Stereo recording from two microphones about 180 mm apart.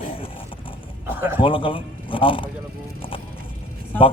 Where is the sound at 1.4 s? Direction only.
30° left (ahead or behind).